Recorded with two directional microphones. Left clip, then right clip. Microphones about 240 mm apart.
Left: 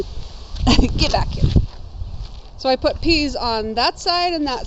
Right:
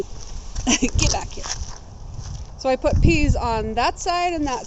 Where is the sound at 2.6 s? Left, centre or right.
Centre.